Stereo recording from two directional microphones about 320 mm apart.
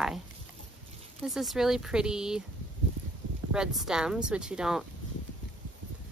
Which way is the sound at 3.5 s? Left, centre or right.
Centre.